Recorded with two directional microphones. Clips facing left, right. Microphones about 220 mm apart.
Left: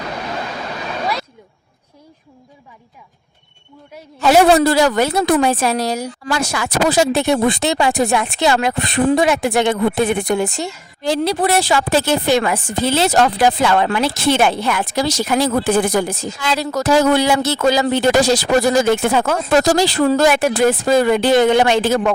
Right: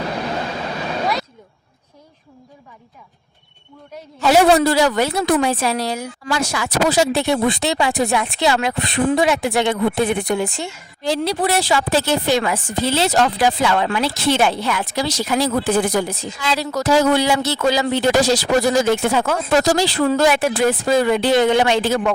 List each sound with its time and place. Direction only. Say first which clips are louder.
4.2 s a woman's voice: left 2 dB; 50° left (ahead or behind)